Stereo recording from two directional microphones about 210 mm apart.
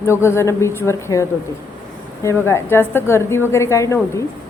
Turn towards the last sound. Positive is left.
turn(degrees=15)  # may be behind; listen again after turning